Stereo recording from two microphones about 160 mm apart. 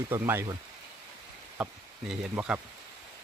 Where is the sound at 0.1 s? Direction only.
15° right (ahead or behind).